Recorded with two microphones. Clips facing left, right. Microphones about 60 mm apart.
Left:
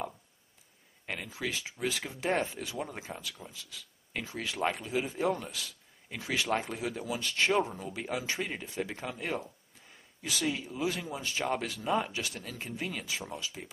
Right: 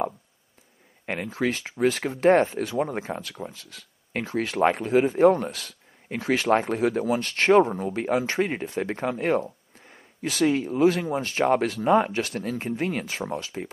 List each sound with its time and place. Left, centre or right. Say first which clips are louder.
1.0 s speech: right 10 dB; right